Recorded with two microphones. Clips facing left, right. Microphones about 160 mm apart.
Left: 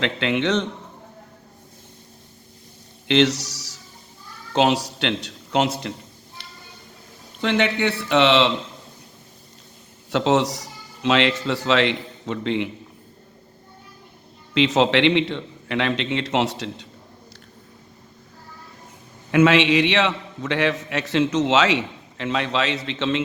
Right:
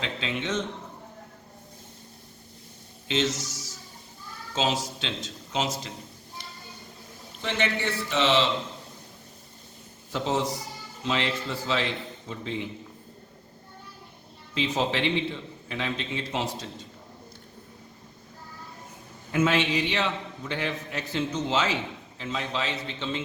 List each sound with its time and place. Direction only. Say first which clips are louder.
0.0 s a man's voice: left 9 dB; 70° left (ahead or behind)
3.1 s a sound: left 9 dB; 70° left (ahead or behind)
4.5 s speech: left 8 dB; 65° left (ahead or behind)
7.4 s speech: left 8 dB; 65° left (ahead or behind)
10.1 s a man's voice: left 8 dB; 80° left
14.5 s a man's voice: left 9 dB; 80° left
19.3 s a man's voice: left 8 dB; 85° left